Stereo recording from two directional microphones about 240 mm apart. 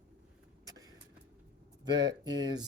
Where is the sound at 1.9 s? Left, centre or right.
Centre.